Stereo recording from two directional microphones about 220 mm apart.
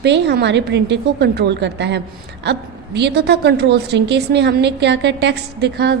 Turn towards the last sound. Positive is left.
turn(degrees=-50)  # may be behind; listen again after turning